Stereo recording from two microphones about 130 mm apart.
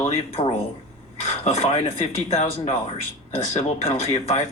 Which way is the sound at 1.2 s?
50° left (ahead or behind).